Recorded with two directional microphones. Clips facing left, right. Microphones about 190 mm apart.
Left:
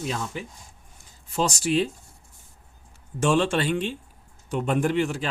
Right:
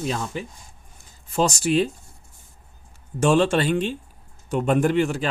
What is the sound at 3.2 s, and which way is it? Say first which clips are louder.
Speech: right 3 dB; 40° right (ahead or behind).